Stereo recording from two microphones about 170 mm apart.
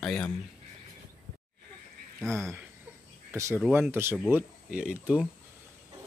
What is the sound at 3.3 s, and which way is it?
Speech, 15° right (ahead or behind).